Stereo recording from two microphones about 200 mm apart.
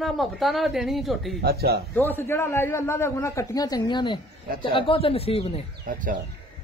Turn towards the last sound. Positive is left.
turn(degrees=-40)  # may be behind; listen again after turning